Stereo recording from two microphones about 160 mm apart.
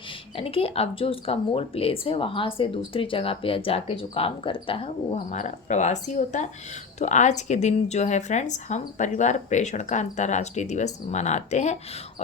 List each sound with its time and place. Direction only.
0.3 s a woman's voice: 35° left (ahead or behind)
5.1 s speech: 50° left (ahead or behind)